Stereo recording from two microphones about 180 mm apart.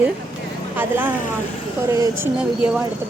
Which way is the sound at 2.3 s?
5° right (ahead or behind).